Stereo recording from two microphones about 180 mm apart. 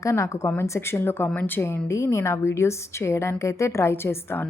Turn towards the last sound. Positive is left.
turn(degrees=15)  # may be behind; listen again after turning